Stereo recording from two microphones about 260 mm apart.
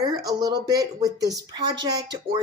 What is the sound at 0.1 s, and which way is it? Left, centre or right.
A woman's voice, centre.